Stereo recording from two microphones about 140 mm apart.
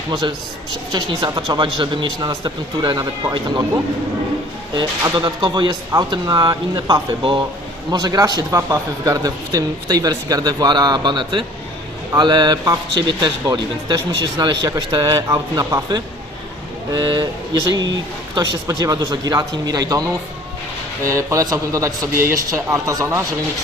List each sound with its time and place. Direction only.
0.1 s speech: 30° right (ahead or behind)
4.7 s speech: 35° right (ahead or behind)